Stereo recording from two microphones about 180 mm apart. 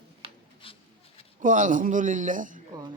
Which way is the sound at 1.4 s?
45° right (ahead or behind).